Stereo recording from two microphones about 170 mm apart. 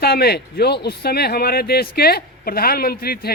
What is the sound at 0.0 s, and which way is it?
A man's voice, 70° left (ahead or behind).